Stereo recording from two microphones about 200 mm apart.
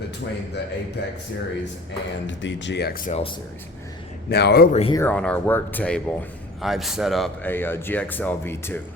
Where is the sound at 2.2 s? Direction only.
65° left (ahead or behind); by 3.2 s 45° left (ahead or behind).